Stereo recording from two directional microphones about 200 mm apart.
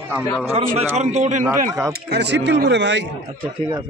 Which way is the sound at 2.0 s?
55° right (ahead or behind).